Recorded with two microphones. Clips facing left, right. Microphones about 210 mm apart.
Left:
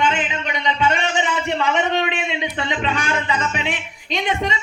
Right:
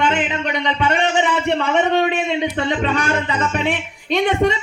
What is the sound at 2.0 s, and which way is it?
Speech, 45° right (ahead or behind).